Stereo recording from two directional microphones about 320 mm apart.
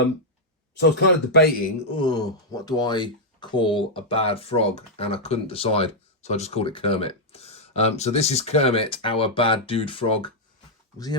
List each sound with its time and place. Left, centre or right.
0.8 s a man's voice: left
2.0 s speech: centre